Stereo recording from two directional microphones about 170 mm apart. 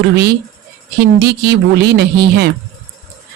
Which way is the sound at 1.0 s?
75° right (ahead or behind).